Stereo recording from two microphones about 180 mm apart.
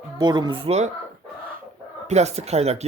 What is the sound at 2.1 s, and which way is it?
Speech, 40° right (ahead or behind).